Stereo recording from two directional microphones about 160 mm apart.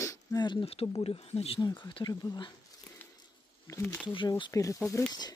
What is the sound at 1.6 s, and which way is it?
Speech, 25° left (ahead or behind).